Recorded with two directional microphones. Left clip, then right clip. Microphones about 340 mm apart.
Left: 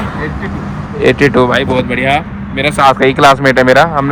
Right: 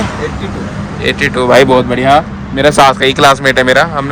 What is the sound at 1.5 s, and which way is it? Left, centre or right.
Speech, centre.